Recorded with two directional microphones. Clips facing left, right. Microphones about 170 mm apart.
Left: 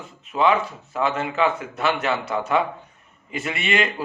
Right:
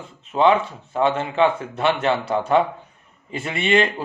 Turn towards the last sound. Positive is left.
turn(degrees=-30)  # may be behind; listen again after turning